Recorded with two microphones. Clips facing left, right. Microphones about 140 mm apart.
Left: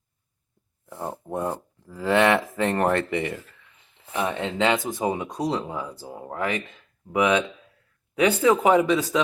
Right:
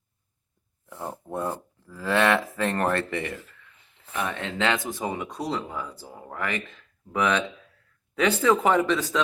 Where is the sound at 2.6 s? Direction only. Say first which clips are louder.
Left 3 dB; 20° left (ahead or behind).